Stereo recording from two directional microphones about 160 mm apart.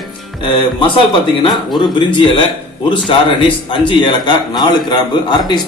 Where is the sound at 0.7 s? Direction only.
30° left (ahead or behind).